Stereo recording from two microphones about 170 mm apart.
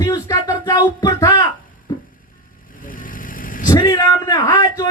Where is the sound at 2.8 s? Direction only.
55° left (ahead or behind).